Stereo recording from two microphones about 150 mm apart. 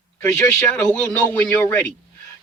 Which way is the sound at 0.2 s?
15° left (ahead or behind).